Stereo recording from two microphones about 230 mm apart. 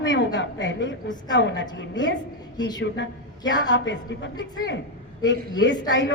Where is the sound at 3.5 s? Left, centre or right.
Left.